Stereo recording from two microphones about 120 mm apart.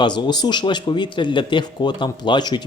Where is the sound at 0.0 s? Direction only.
35° left (ahead or behind).